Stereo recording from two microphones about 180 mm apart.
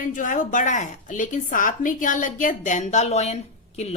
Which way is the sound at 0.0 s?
45° left (ahead or behind).